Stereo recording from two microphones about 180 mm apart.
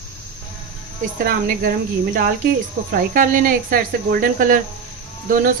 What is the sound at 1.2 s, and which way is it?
Speech, 55° right (ahead or behind).